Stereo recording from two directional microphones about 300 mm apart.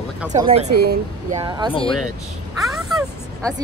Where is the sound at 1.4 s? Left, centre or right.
Centre.